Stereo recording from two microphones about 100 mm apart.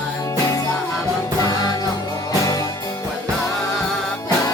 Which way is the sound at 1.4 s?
40° left (ahead or behind).